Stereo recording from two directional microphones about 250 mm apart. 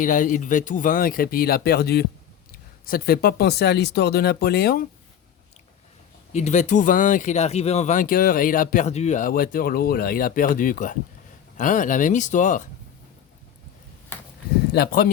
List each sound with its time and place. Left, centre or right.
0.0 s speech: left
6.3 s speech: left
14.7 s speech: left